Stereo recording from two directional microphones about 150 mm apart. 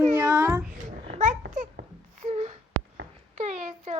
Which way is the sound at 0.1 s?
20° right (ahead or behind).